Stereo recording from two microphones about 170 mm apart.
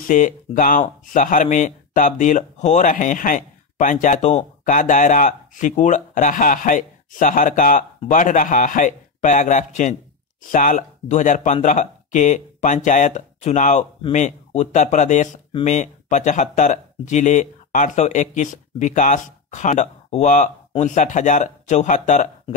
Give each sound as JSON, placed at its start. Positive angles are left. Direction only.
{"t": 0.0, "sound": "speech", "side_deg": 55}